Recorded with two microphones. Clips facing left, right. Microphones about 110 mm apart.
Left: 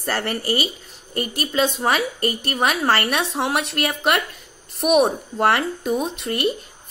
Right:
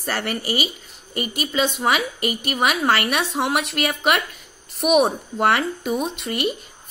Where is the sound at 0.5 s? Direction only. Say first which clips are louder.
Left 1 dB; 35° left (ahead or behind).